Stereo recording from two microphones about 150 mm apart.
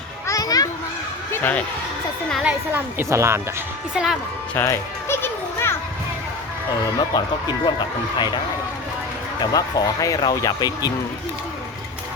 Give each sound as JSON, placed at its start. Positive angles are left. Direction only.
{"t": 0.3, "sound": "children playing", "side_deg": 25}
{"t": 1.3, "sound": "speech", "side_deg": 10}
{"t": 2.3, "sound": "a woman's voice", "side_deg": -5}
{"t": 3.9, "sound": "speech", "side_deg": 0}
{"t": 4.5, "sound": "music", "side_deg": 15}
{"t": 7.1, "sound": "speech", "side_deg": 30}
{"t": 9.4, "sound": "speech", "side_deg": 25}